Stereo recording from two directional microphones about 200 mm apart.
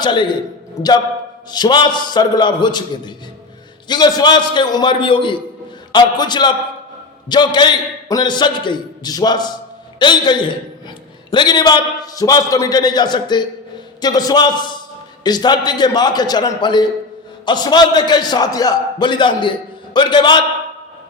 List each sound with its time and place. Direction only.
0.0 s a man's voice: 25° left (ahead or behind)
1.5 s a man's voice: 20° left (ahead or behind)